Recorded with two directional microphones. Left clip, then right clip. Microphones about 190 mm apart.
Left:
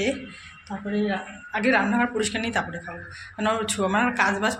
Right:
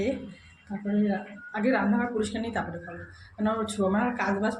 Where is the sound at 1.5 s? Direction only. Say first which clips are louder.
Left 5 dB; 5° right (ahead or behind).